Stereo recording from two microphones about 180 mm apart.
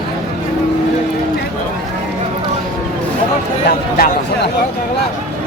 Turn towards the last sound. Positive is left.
turn(degrees=60)  # may be behind; listen again after turning